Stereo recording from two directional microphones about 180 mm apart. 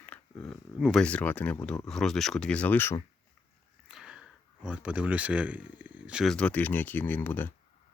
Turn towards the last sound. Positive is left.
turn(degrees=10)  # may be behind; listen again after turning